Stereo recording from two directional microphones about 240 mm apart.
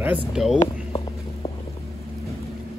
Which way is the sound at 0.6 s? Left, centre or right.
Left.